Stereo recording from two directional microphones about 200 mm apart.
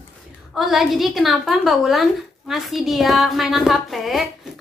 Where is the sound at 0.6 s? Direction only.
Centre (ahead or behind).